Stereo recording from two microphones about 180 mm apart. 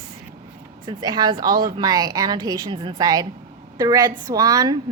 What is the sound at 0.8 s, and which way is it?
A woman's voice, 25° right (ahead or behind).